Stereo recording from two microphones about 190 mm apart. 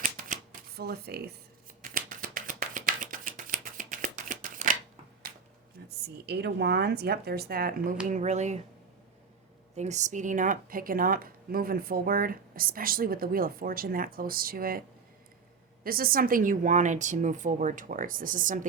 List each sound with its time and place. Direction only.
0.0 s typewriter: 45° right (ahead or behind)
1.9 s a sound: 45° right (ahead or behind)
6.2 s speech: 60° right (ahead or behind)
8.1 s speech: 35° right (ahead or behind)
9.7 s speech: 35° right (ahead or behind)
15.8 s speech: 50° right (ahead or behind)